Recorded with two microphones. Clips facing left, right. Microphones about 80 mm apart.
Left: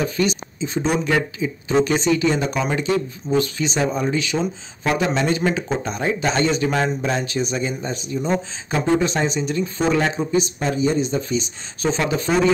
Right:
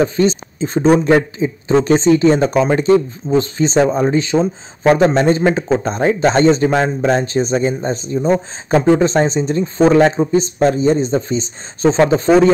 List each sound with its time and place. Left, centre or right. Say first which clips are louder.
0.0 s speech: right 7 dB; right